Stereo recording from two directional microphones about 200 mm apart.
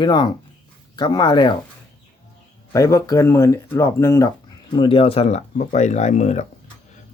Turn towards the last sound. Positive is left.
turn(degrees=35)  # may be behind; listen again after turning